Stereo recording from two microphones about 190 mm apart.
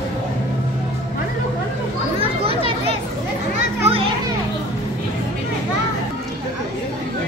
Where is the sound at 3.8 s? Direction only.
30° right (ahead or behind).